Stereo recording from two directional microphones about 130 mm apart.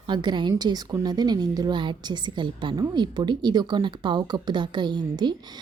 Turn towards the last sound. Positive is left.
turn(degrees=-35)  # may be behind; listen again after turning